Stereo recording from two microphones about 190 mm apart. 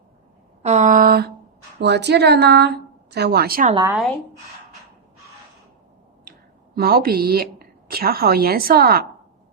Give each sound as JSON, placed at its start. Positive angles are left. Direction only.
{"t": 0.6, "sound": "a woman's voice", "side_deg": -35}
{"t": 1.8, "sound": "a woman's voice", "side_deg": -65}
{"t": 6.7, "sound": "a woman's voice", "side_deg": -55}